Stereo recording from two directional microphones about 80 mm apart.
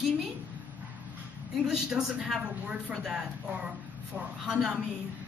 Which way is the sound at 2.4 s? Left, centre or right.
Centre.